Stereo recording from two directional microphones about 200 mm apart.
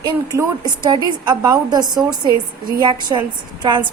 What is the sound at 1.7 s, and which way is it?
A woman's voice, 20° right (ahead or behind).